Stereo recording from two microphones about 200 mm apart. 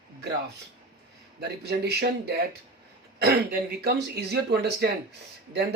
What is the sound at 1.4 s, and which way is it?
Speech, 55° right (ahead or behind).